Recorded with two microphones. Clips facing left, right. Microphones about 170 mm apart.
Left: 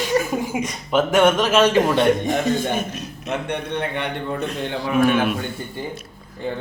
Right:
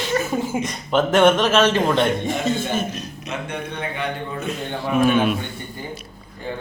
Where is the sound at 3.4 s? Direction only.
70° left (ahead or behind).